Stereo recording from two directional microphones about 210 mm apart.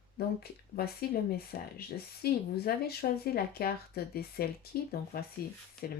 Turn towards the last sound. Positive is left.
turn(degrees=5)  # may be behind; listen again after turning